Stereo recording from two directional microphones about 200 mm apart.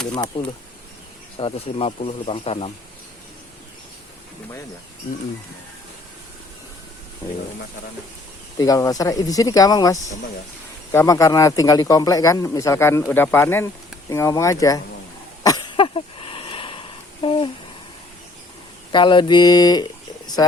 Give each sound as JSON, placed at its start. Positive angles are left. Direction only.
{"t": 1.4, "sound": "speech", "side_deg": 30}
{"t": 8.5, "sound": "speech", "side_deg": 20}
{"t": 15.4, "sound": "a sound", "side_deg": 20}
{"t": 18.9, "sound": "speech", "side_deg": 25}